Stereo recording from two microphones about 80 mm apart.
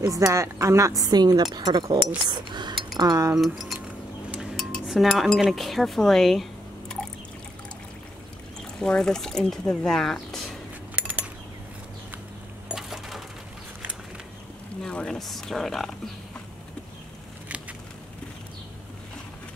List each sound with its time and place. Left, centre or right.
0.3 s a woman's voice: right
3.0 s speech: right
3.3 s speech: centre
4.6 s cutlery: centre
8.7 s speech: centre
11.0 s a sound: right
12.6 s coin: centre
14.8 s speech: centre